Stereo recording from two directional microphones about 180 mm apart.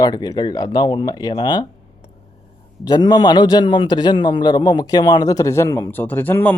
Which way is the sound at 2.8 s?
20° left (ahead or behind).